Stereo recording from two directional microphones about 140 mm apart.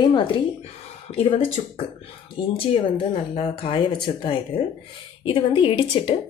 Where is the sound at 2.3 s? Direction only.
40° left (ahead or behind).